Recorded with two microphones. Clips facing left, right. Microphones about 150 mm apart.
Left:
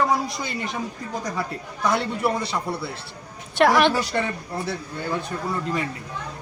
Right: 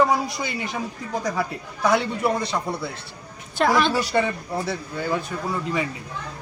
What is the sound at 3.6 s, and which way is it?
Speech, 70° left (ahead or behind).